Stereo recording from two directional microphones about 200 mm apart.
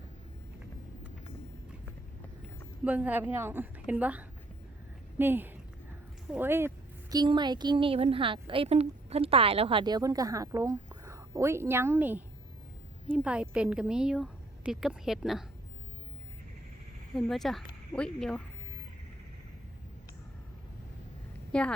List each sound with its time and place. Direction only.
2.8 s a woman's voice: 10° right (ahead or behind)
17.2 s a woman's voice: centre (ahead or behind)
21.5 s a woman's voice: 5° left (ahead or behind)